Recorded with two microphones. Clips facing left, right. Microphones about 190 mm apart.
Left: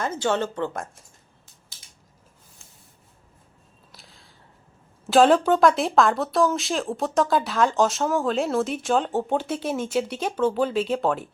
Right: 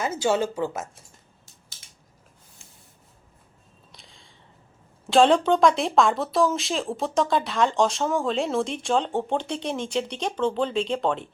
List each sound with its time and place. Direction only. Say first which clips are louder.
0.0 s speech: right 1 dB; 10° right (ahead or behind)
3.9 s a sound: left 1 dB; 5° left (ahead or behind)
5.0 s speech: left 1 dB; 5° left (ahead or behind)